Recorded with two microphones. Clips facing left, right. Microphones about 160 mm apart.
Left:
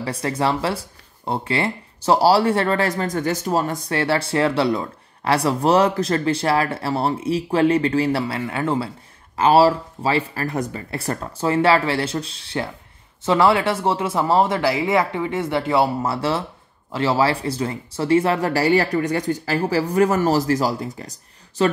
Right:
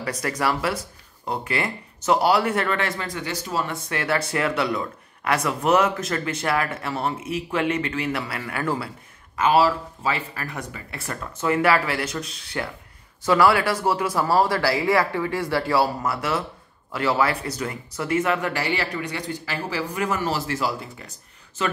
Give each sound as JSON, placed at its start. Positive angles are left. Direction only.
{"t": 0.0, "sound": "speech", "side_deg": 30}
{"t": 9.4, "sound": "speech", "side_deg": 35}